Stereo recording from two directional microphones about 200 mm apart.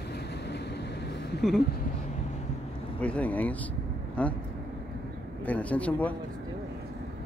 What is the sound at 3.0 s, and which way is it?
A man's voice, 5° left (ahead or behind).